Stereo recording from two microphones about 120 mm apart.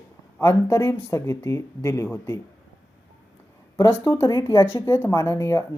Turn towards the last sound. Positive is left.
turn(degrees=25)  # may be behind; listen again after turning